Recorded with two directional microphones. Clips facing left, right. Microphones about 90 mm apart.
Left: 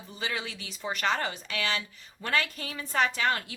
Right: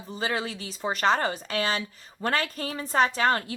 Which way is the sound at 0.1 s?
40° right (ahead or behind).